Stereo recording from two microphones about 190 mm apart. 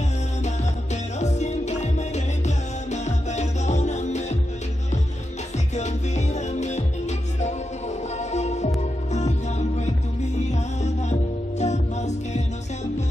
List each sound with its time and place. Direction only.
1.2 s music: 35° left (ahead or behind)
5.8 s music: 35° left (ahead or behind)